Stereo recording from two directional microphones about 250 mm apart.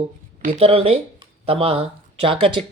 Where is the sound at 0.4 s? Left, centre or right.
Right.